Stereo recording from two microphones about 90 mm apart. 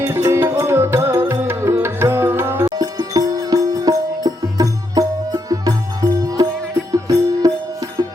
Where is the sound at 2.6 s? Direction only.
45° right (ahead or behind).